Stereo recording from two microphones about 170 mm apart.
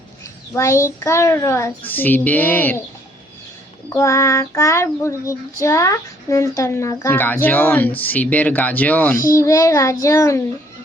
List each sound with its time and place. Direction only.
0.5 s child singing: 20° left (ahead or behind)
3.8 s child singing: 15° left (ahead or behind)